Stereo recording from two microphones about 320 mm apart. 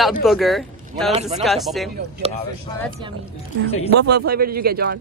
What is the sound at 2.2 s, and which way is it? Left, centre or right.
Speech, centre.